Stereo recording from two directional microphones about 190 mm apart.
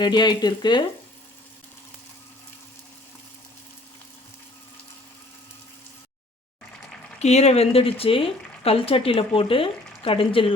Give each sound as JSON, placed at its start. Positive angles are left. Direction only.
{"t": 0.0, "sound": "speech", "side_deg": 25}
{"t": 7.2, "sound": "speech", "side_deg": 35}